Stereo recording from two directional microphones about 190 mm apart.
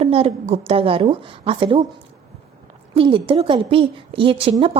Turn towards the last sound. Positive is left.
turn(degrees=-30)  # may be behind; listen again after turning